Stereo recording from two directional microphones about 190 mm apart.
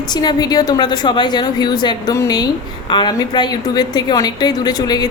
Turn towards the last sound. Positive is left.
turn(degrees=20)  # may be behind; listen again after turning